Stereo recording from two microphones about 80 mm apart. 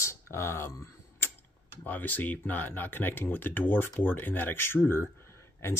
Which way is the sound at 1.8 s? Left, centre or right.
Left.